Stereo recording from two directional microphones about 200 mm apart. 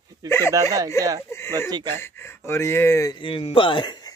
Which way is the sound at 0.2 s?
20° right (ahead or behind).